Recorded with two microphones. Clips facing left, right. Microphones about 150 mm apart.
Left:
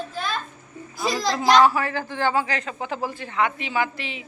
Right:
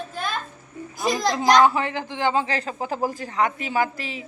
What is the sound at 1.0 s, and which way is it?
A woman's voice, 20° right (ahead or behind).